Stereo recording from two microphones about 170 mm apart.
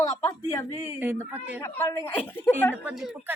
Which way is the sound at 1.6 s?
15° left (ahead or behind).